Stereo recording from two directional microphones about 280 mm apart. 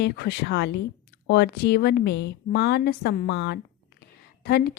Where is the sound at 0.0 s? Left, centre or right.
Left.